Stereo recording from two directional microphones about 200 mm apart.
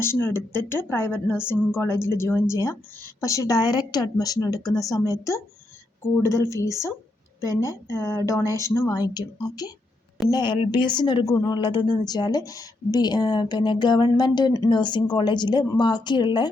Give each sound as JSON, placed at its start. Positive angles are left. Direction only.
{"t": 0.0, "sound": "a woman's voice", "side_deg": 10}
{"t": 6.5, "sound": "a woman's voice", "side_deg": 15}